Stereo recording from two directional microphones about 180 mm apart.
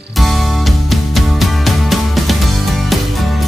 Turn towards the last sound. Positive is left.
turn(degrees=0)  # may be behind; listen again after turning